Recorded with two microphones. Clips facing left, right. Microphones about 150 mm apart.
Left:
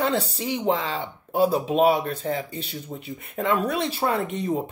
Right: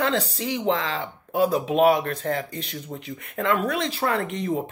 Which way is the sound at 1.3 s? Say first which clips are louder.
Left 1 dB; 35° left (ahead or behind).